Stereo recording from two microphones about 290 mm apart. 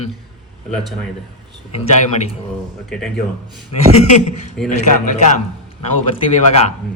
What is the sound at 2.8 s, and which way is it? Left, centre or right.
Speech, centre.